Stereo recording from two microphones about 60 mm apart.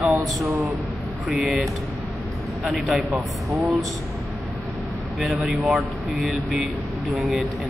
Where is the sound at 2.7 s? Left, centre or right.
Centre.